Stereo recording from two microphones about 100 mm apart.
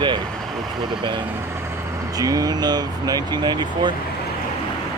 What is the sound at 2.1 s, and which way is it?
Speech, 40° right (ahead or behind).